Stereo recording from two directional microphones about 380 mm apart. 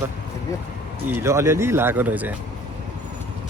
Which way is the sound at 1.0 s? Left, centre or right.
Centre.